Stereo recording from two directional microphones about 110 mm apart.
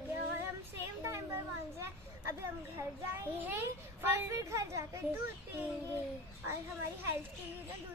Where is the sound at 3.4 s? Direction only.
20° right (ahead or behind).